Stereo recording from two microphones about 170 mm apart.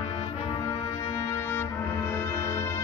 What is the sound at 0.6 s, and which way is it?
Music, 20° left (ahead or behind).